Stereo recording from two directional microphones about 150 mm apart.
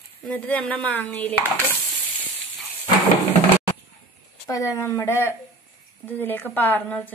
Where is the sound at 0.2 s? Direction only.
5° left (ahead or behind).